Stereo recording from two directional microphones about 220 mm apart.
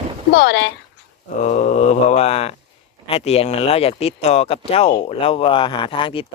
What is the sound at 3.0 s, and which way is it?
Speech, 25° left (ahead or behind).